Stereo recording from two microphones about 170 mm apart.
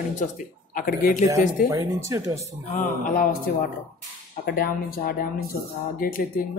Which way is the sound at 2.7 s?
50° left (ahead or behind).